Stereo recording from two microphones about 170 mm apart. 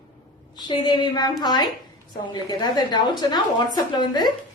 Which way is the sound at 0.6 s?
25° left (ahead or behind).